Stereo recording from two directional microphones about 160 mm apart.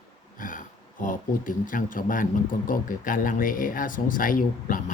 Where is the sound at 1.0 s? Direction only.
55° left (ahead or behind).